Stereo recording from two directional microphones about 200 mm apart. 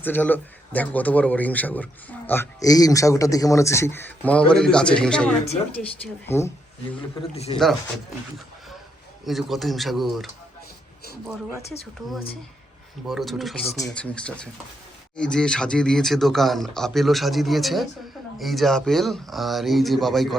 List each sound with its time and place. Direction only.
0.0 s speech: 10° left (ahead or behind)
7.2 s a man's voice: 30° left (ahead or behind)
9.2 s speech: centre (ahead or behind)
13.1 s speech: centre (ahead or behind)